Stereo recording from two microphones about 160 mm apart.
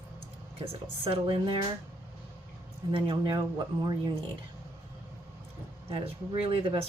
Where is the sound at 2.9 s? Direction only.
30° right (ahead or behind).